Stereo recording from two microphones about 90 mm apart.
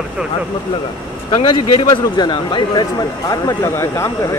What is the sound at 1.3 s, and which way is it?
Speech, 75° left (ahead or behind).